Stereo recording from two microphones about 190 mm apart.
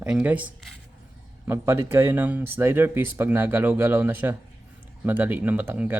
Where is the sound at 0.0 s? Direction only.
5° right (ahead or behind).